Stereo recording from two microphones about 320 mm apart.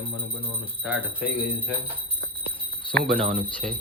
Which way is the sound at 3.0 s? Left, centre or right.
Centre.